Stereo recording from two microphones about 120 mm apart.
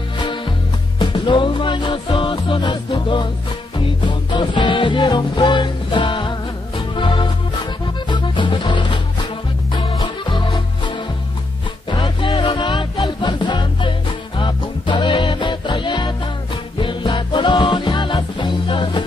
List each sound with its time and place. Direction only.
0.9 s music: 40° left (ahead or behind)
11.9 s music: 45° left (ahead or behind)